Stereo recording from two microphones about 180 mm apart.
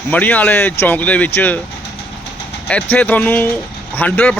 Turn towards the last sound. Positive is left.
turn(degrees=10)  # may be behind; listen again after turning